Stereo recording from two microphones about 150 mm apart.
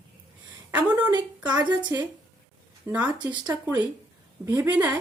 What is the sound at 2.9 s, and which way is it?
Speech, 10° right (ahead or behind).